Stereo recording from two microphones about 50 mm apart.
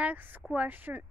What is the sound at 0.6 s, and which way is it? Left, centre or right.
Speech, right.